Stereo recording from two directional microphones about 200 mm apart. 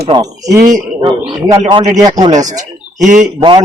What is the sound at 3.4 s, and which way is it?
Speech, 20° right (ahead or behind).